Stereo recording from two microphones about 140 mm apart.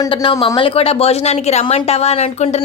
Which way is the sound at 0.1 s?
40° left (ahead or behind).